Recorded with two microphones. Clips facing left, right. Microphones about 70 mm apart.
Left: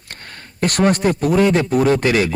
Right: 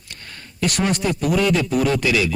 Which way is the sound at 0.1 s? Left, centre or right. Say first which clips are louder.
Left 3 dB; left.